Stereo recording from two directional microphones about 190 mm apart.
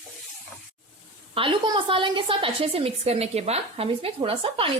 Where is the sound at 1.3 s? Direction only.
25° right (ahead or behind).